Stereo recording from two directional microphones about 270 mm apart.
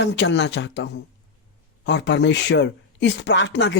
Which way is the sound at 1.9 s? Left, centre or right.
Left.